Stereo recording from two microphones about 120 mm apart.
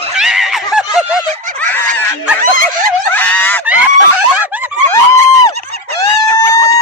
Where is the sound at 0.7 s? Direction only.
5° right (ahead or behind).